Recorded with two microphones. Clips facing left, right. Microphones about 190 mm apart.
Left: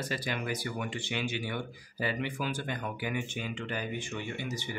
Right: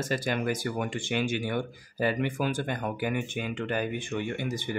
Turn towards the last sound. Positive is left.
turn(degrees=-55)  # may be behind; listen again after turning